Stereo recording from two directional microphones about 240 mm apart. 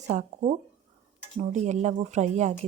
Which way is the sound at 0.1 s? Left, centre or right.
Right.